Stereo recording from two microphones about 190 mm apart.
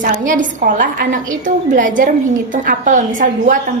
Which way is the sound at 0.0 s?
45° right (ahead or behind).